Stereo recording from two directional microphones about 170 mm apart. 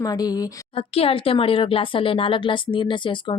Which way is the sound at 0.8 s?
35° left (ahead or behind).